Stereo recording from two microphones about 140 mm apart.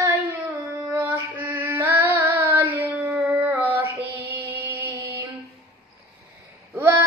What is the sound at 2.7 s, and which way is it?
Child singing, 15° right (ahead or behind).